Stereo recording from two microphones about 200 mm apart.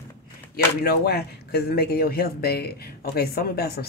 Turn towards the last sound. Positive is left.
turn(degrees=50)  # may be behind; listen again after turning